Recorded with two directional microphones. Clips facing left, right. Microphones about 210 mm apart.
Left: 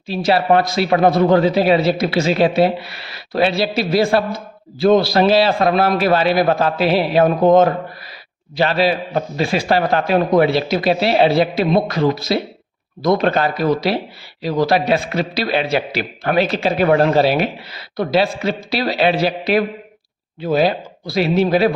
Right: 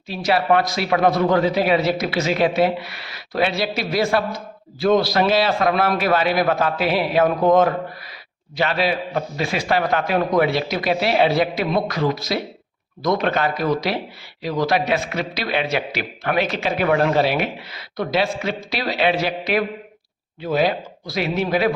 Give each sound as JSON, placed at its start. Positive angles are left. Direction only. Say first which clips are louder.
{"t": 0.1, "sound": "a man's voice", "louder": "left 3 dB", "side_deg": 30}